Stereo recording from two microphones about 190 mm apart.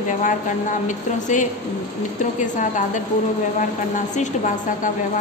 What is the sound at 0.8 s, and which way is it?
Speech, 40° left (ahead or behind).